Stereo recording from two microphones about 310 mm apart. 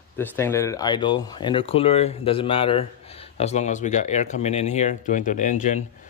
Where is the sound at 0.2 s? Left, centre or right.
Centre.